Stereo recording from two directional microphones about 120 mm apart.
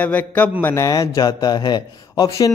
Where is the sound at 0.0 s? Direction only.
15° left (ahead or behind).